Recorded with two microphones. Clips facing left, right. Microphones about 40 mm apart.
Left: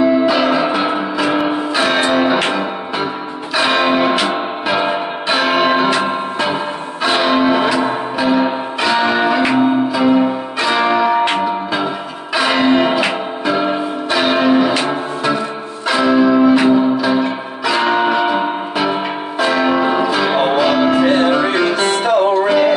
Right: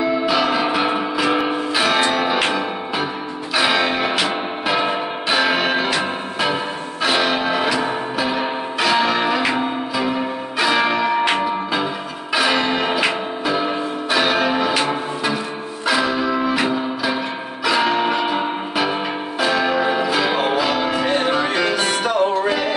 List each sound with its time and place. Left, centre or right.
0.0 s music: centre